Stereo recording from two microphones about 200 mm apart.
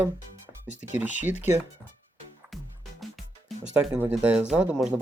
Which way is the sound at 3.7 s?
5° right (ahead or behind).